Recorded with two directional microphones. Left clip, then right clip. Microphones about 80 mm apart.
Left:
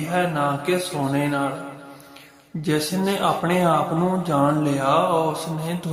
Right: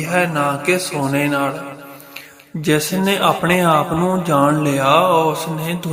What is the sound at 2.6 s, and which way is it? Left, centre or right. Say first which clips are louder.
A man's voice: right 6 dB; right.